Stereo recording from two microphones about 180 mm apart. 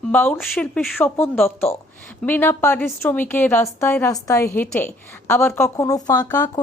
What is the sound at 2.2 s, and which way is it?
A woman's voice, 10° left (ahead or behind).